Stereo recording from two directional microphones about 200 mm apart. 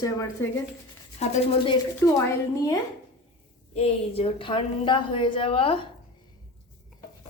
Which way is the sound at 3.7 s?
30° left (ahead or behind).